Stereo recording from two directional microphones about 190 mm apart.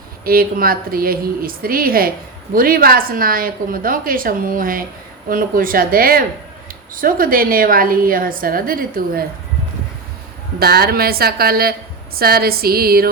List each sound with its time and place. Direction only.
0.3 s a woman's voice: 50° right (ahead or behind)
10.6 s a woman's voice: 55° right (ahead or behind)